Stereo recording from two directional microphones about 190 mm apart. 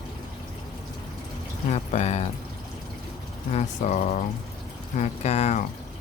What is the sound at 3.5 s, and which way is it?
Speech, 40° left (ahead or behind).